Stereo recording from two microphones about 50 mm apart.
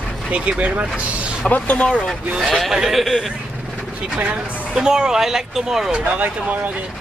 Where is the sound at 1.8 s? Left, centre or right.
Centre.